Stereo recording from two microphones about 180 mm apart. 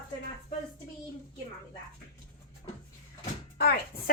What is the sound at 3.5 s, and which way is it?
Speech, 60° left (ahead or behind).